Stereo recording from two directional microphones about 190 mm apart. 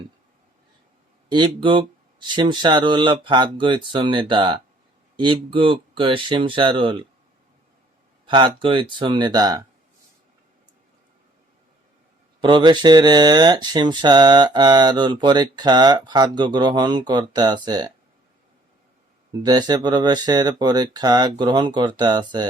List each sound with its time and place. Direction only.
1.3 s speech: 25° right (ahead or behind)
8.3 s speech: 25° right (ahead or behind)
12.4 s speech: 25° right (ahead or behind)
19.3 s speech: 20° right (ahead or behind)